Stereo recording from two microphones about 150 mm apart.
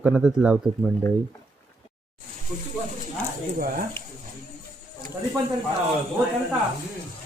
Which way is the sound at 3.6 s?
70° right (ahead or behind).